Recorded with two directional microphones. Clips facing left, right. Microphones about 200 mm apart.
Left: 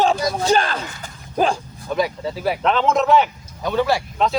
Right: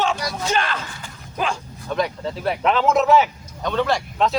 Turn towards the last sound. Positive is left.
turn(degrees=5)  # may be behind; listen again after turning